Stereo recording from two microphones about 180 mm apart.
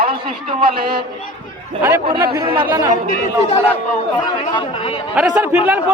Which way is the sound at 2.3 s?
25° right (ahead or behind).